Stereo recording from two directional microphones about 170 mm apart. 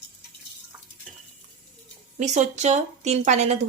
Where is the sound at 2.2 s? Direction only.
45° right (ahead or behind).